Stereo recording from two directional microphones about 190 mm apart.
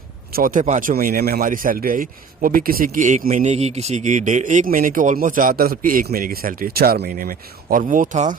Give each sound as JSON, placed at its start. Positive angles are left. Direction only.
{"t": 0.3, "sound": "speech", "side_deg": -45}